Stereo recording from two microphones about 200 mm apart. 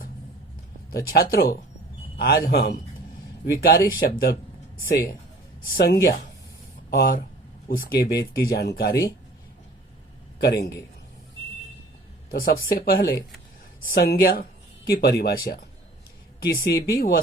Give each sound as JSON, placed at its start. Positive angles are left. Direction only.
{"t": 0.9, "sound": "speech", "side_deg": 50}
{"t": 5.7, "sound": "speech", "side_deg": 50}
{"t": 10.3, "sound": "a man's voice", "side_deg": 50}
{"t": 12.3, "sound": "speech", "side_deg": 50}